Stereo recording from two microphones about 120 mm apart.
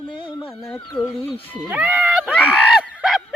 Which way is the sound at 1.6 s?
10° right (ahead or behind).